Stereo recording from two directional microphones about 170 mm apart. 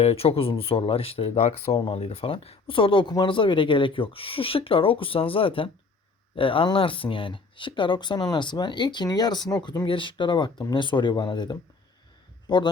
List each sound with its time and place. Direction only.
0.0 s speech: 35° left (ahead or behind)